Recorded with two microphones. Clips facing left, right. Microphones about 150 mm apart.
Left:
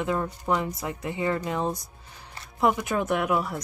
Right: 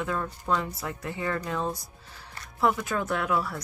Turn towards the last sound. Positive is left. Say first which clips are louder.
# left 3 dB
turn(degrees=20)  # may be behind; listen again after turning